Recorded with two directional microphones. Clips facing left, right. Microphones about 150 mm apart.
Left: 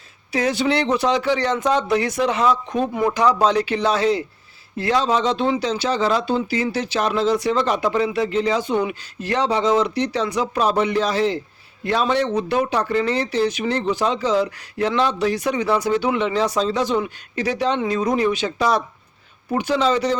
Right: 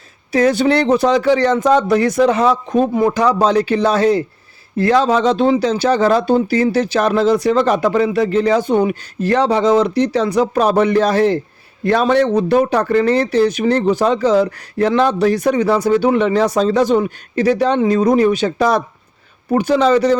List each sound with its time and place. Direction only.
0.3 s speech: 45° right (ahead or behind)